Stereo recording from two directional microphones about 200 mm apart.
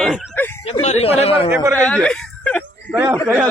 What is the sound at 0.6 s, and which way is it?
Speech, 30° left (ahead or behind).